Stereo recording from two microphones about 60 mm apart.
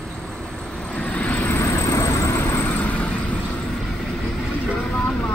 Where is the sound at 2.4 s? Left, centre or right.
Left.